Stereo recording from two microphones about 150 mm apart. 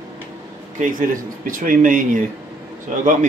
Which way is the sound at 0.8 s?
65° right (ahead or behind).